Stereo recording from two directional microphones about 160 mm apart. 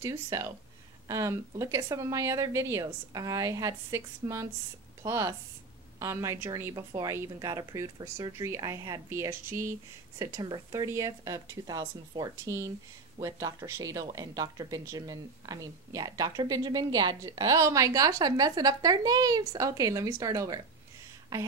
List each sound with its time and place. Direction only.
0.0 s speech: 20° right (ahead or behind)